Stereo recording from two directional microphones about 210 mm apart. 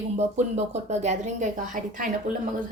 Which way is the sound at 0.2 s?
30° right (ahead or behind).